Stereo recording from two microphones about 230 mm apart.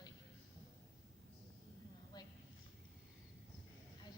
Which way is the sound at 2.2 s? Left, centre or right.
Centre.